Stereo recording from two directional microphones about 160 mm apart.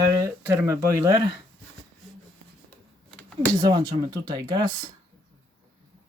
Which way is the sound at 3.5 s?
25° right (ahead or behind).